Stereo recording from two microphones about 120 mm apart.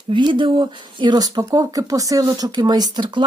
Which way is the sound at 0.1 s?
40° right (ahead or behind).